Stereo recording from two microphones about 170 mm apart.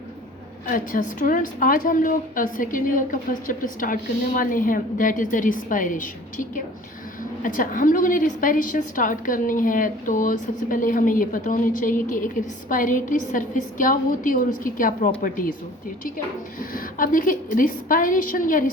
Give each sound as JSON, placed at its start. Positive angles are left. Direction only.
{"t": 0.7, "sound": "a woman's voice", "side_deg": 55}